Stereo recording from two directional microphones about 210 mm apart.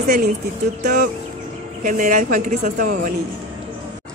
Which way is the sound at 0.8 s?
45° right (ahead or behind).